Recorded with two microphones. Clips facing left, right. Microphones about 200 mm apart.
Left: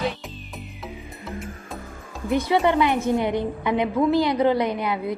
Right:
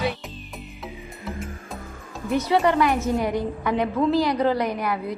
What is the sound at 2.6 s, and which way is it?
A woman's voice, 20° left (ahead or behind).